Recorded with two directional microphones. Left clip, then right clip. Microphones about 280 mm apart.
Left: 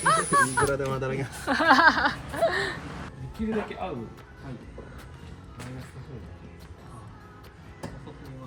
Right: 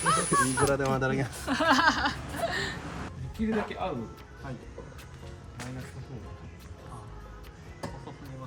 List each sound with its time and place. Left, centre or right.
0.0 s honk: centre
1.0 s speech: right
1.4 s a man's voice: centre